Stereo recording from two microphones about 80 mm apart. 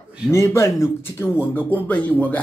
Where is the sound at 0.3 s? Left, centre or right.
Left.